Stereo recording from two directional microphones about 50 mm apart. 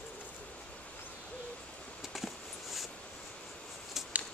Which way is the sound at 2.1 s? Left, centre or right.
Centre.